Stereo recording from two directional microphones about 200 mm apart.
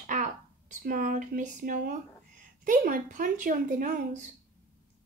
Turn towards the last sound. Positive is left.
turn(degrees=-40)  # may be behind; listen again after turning